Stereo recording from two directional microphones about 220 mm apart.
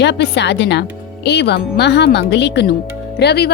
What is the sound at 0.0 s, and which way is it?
Speech, 50° left (ahead or behind).